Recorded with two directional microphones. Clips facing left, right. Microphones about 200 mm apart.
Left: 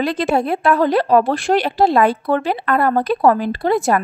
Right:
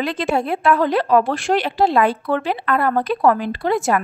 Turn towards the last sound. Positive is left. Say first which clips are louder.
# left 2 dB
turn(degrees=35)  # may be behind; listen again after turning